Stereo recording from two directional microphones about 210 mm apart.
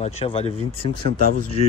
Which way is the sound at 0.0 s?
30° left (ahead or behind).